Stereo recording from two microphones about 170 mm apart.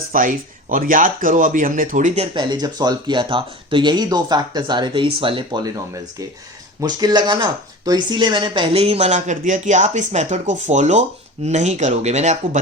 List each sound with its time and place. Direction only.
0.1 s speech: 55° right (ahead or behind)